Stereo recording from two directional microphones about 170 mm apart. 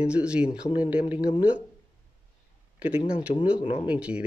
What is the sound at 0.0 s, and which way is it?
Speech, 5° right (ahead or behind).